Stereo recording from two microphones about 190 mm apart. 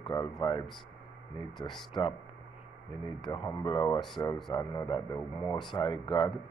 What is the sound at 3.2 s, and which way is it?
Speech, 25° left (ahead or behind).